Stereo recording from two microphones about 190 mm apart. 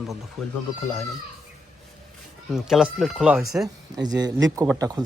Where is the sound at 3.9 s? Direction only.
20° right (ahead or behind).